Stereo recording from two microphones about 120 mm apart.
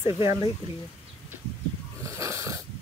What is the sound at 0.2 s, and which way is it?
Speech, 25° right (ahead or behind).